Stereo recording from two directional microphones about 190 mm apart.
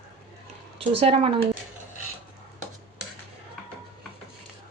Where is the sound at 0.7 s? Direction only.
30° right (ahead or behind).